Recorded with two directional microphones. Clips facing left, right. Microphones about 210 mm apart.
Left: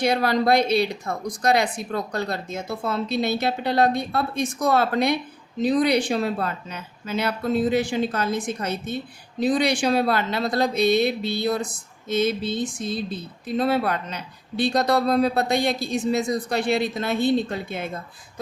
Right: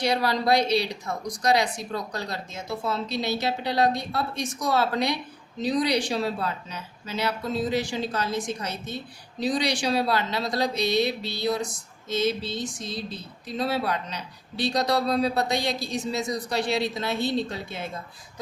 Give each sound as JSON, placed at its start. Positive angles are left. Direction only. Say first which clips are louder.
{"t": 0.0, "sound": "speech", "louder": "left 4 dB", "side_deg": 55}